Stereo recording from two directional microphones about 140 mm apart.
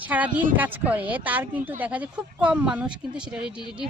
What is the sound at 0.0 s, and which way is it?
A woman's voice, 10° right (ahead or behind).